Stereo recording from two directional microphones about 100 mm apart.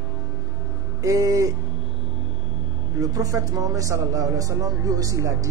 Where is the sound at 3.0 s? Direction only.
35° right (ahead or behind).